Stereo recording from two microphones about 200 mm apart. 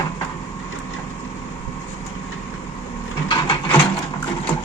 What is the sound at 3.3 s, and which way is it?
Printer, 25° left (ahead or behind).